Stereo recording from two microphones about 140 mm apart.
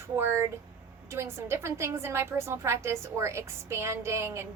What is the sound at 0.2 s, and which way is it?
A woman's voice, 15° right (ahead or behind).